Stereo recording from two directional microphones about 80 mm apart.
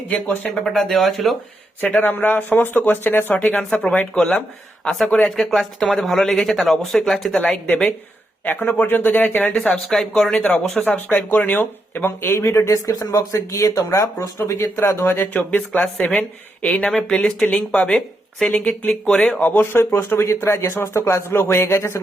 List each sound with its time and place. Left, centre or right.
0.6 s speech: centre
1.8 s speech: centre
8.4 s speech: left; by 10.4 s centre
10.8 s speech: left